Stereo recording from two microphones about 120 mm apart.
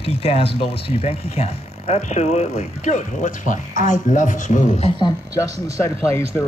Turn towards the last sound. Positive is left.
turn(degrees=25)  # may be behind; listen again after turning